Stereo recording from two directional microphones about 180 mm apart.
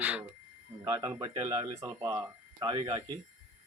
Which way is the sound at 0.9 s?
20° right (ahead or behind).